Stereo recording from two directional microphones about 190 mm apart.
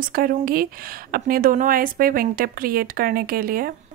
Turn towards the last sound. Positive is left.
turn(degrees=-50)  # may be behind; listen again after turning